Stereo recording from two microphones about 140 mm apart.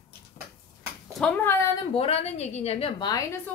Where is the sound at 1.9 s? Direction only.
50° left (ahead or behind).